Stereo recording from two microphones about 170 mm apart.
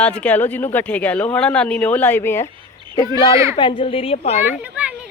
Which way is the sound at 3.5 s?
30° left (ahead or behind).